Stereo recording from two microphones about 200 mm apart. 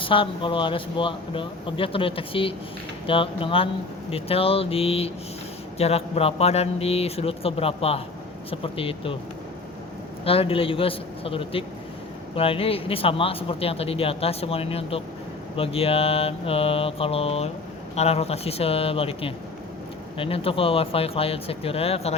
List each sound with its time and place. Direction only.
0.0 s speech: 25° left (ahead or behind)
10.2 s speech: 25° left (ahead or behind)